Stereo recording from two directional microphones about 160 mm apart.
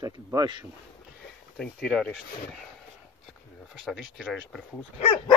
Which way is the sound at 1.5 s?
5° left (ahead or behind).